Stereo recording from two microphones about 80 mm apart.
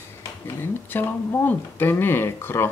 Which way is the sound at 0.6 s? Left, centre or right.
Left.